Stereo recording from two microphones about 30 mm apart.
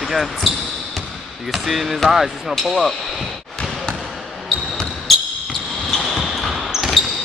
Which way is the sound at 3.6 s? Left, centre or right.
Left.